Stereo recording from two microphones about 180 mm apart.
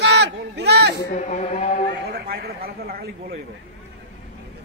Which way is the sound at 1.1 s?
40° left (ahead or behind).